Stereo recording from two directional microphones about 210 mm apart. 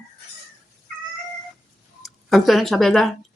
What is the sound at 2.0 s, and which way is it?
Speech, centre (ahead or behind).